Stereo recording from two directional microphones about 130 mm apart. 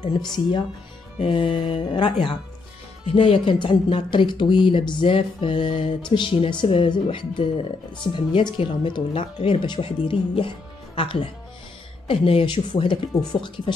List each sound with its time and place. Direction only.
0.0 s speech: 35° left (ahead or behind)